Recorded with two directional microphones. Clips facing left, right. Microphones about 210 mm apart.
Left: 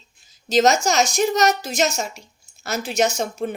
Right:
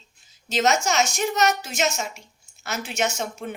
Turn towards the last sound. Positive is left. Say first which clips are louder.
# left 5 dB
turn(degrees=35)  # may be behind; listen again after turning